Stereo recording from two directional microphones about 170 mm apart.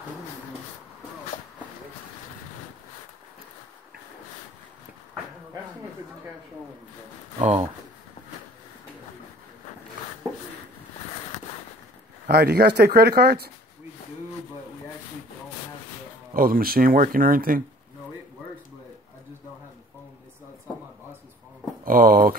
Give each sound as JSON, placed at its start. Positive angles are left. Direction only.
{"t": 7.3, "sound": "speech", "side_deg": -40}
{"t": 12.3, "sound": "speech", "side_deg": -70}
{"t": 16.3, "sound": "speech", "side_deg": -55}
{"t": 21.8, "sound": "speech", "side_deg": -55}